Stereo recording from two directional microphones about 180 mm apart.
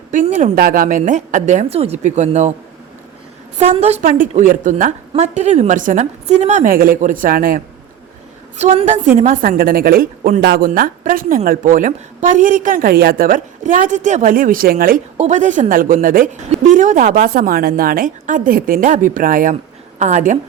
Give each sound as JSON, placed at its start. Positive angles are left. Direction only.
{"t": 0.1, "sound": "a woman's voice", "side_deg": -45}
{"t": 3.6, "sound": "a woman's voice", "side_deg": -40}
{"t": 8.5, "sound": "a woman's voice", "side_deg": -40}
{"t": 9.4, "sound": "a woman's voice", "side_deg": -55}
{"t": 15.2, "sound": "a woman's voice", "side_deg": -45}